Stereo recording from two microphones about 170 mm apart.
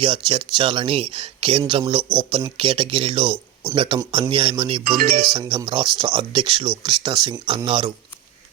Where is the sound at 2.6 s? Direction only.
30° right (ahead or behind).